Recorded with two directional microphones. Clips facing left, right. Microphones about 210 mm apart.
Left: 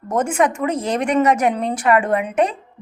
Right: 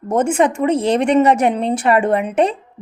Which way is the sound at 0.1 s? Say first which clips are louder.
Right 3 dB; 25° right (ahead or behind).